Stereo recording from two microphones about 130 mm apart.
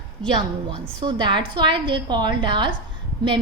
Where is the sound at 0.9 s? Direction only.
35° right (ahead or behind).